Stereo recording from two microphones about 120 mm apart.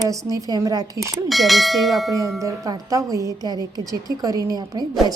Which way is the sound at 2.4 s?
30° right (ahead or behind).